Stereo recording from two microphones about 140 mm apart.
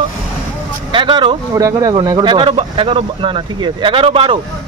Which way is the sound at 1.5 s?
25° right (ahead or behind).